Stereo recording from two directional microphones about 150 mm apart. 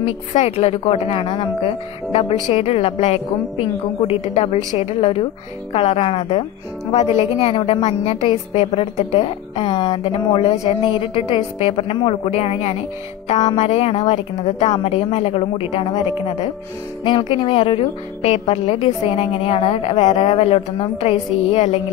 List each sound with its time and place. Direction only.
0.0 s a woman's voice: 40° left (ahead or behind)
4.7 s a woman's voice: 40° left (ahead or behind)
13.3 s a woman's voice: 30° left (ahead or behind)
13.6 s a woman's voice: 40° left (ahead or behind)